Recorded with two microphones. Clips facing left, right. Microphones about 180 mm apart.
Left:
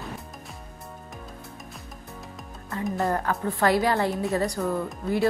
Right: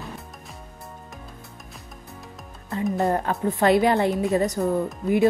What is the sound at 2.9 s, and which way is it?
A woman's voice, 20° right (ahead or behind).